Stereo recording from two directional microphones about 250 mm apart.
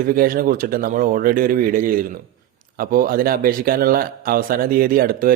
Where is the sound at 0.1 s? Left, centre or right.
Right.